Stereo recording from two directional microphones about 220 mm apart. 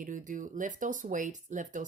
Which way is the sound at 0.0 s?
35° right (ahead or behind).